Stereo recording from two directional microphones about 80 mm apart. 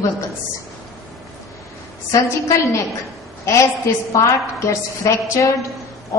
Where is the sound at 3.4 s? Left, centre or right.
Left.